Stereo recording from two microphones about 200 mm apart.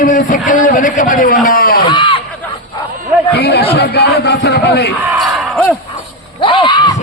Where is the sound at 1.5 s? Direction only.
45° left (ahead or behind).